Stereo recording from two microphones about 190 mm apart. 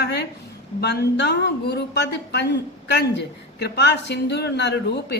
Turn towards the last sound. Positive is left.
turn(degrees=60)  # may be behind; listen again after turning